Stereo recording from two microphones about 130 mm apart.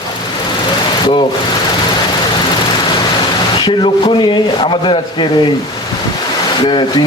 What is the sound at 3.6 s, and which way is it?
Speech, 40° left (ahead or behind).